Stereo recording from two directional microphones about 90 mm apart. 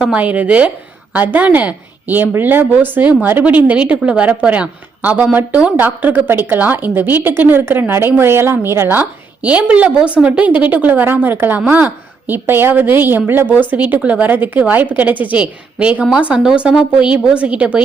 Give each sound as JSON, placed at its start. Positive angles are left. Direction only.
{"t": 0.0, "sound": "a woman's voice", "side_deg": -15}